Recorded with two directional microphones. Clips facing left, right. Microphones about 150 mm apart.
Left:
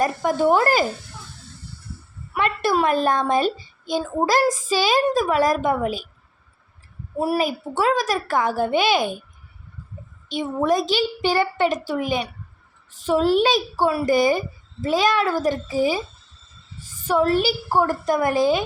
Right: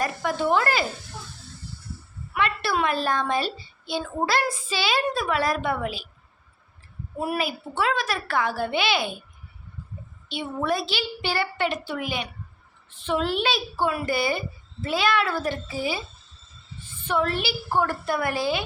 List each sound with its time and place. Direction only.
0.0 s speech: 45° left (ahead or behind)
2.3 s a woman's voice: 45° left (ahead or behind)
7.2 s a woman's voice: 40° left (ahead or behind)
10.2 s a woman's voice: 40° left (ahead or behind)